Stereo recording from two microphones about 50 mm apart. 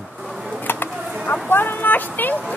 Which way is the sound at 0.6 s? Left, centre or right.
Left.